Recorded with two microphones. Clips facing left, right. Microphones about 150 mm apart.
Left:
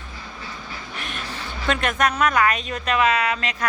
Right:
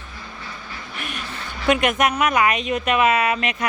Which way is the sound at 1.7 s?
15° right (ahead or behind).